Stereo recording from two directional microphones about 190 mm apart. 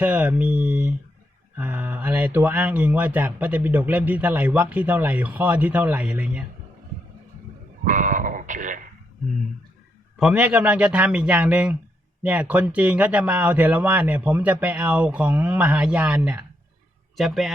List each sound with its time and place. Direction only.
0.0 s speech: 10° right (ahead or behind)
7.9 s speech: 40° right (ahead or behind)
10.2 s a man's voice: 5° right (ahead or behind)